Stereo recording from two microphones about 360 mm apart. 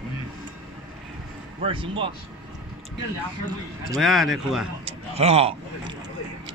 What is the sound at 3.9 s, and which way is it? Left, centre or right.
Speech, centre.